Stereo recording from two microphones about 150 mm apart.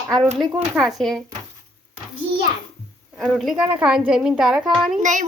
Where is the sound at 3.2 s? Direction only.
Centre (ahead or behind).